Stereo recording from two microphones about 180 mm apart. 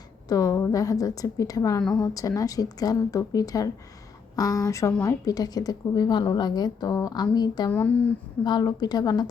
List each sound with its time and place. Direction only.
0.3 s a woman's voice: 20° left (ahead or behind)
7.7 s speech: 10° left (ahead or behind)
8.4 s a woman's voice: 25° left (ahead or behind)